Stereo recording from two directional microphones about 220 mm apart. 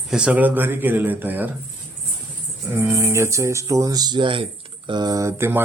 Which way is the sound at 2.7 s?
10° right (ahead or behind).